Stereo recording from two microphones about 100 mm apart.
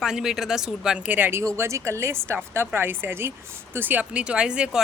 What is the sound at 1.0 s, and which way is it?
A woman's voice, 20° right (ahead or behind).